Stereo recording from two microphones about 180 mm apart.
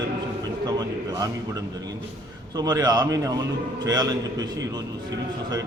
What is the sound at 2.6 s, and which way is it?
A man's voice, 20° right (ahead or behind).